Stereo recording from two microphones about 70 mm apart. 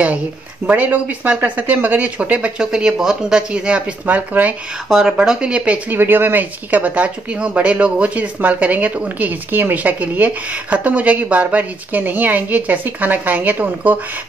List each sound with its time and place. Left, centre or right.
0.7 s speech: right
4.8 s speech: centre
5.9 s speech: right